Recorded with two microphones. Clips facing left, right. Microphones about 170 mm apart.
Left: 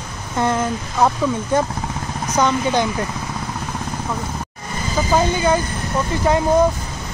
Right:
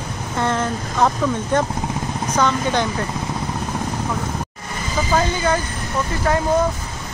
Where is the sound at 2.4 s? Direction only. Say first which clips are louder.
Left 2 dB; 15° left (ahead or behind).